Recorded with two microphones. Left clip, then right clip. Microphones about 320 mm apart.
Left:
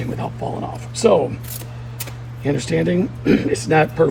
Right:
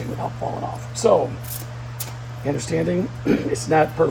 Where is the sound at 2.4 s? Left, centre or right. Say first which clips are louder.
Left 3 dB; left.